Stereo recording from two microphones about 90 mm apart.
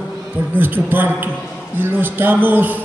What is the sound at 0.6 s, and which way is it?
A man's voice, 25° right (ahead or behind).